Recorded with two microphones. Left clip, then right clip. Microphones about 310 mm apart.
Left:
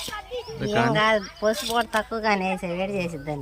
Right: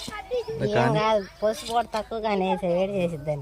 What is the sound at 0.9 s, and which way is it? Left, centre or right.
Speech, right.